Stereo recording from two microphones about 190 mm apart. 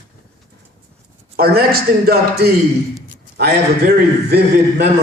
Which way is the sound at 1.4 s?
55° right (ahead or behind).